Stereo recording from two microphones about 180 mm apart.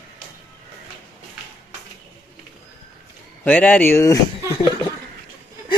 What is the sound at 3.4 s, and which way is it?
Speech, 10° left (ahead or behind).